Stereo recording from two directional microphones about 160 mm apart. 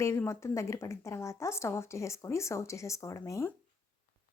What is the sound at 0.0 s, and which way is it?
Speech, 15° left (ahead or behind).